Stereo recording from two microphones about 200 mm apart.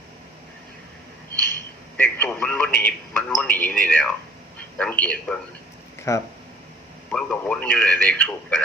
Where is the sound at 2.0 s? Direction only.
10° left (ahead or behind).